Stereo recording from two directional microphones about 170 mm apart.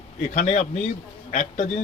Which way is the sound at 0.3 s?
45° left (ahead or behind).